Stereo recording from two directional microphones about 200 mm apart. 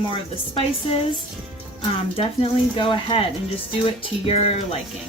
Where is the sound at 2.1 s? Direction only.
25° left (ahead or behind).